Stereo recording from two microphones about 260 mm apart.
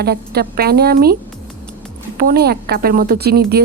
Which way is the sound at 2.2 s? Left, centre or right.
Right.